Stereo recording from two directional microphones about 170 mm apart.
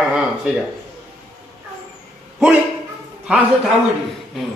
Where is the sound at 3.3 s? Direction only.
5° right (ahead or behind).